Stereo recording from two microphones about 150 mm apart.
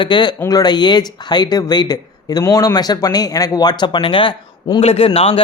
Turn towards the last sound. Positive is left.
turn(degrees=40)  # may be behind; listen again after turning